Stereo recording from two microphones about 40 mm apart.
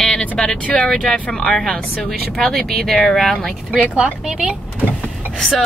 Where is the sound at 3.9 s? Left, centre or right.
Right.